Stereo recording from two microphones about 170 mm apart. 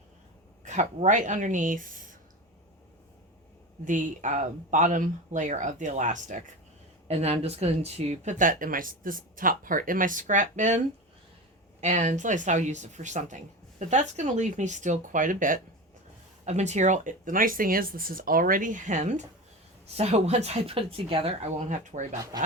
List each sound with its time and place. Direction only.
0.6 s speech: 45° right (ahead or behind)
3.8 s speech: 50° right (ahead or behind)
11.8 s speech: 45° right (ahead or behind)